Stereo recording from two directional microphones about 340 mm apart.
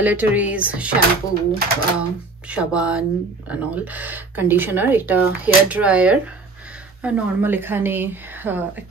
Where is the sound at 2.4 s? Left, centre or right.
Centre.